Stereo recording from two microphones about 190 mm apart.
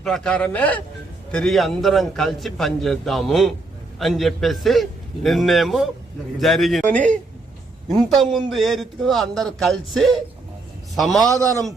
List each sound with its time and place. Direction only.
0.0 s a man's voice: 5° left (ahead or behind)
11.3 s a man's voice: 15° right (ahead or behind)